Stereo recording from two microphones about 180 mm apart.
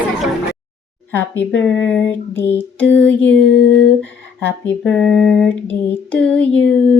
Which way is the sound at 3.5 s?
90° left.